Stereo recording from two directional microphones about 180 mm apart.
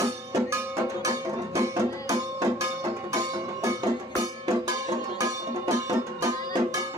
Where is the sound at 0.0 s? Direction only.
15° right (ahead or behind).